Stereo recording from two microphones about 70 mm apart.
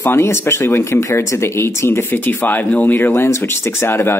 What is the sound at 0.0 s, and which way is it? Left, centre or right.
A woman's voice, left.